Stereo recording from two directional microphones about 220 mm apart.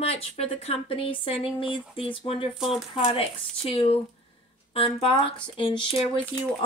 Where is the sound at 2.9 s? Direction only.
25° left (ahead or behind).